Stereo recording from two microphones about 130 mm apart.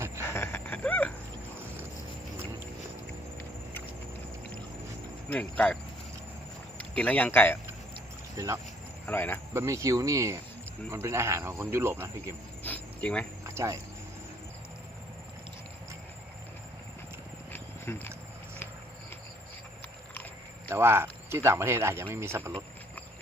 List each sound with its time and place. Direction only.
0.3 s a sound: 20° left (ahead or behind)
5.3 s speech: 10° left (ahead or behind)
6.9 s speech: 10° left (ahead or behind)
8.4 s speech: 25° right (ahead or behind)
9.0 s speech: 15° left (ahead or behind)
9.5 s speech: 20° right (ahead or behind)
12.6 s cricket: 10° left (ahead or behind)
13.4 s a sound: 20° right (ahead or behind)
17.5 s a sound: 15° left (ahead or behind)
20.7 s speech: 20° right (ahead or behind)